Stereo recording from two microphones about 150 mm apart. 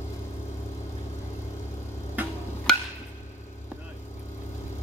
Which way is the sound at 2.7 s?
5° left (ahead or behind).